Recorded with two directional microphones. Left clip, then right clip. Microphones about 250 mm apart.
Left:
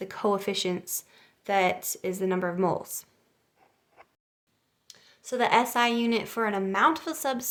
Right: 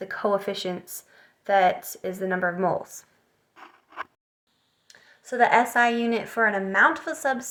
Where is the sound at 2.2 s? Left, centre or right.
Left.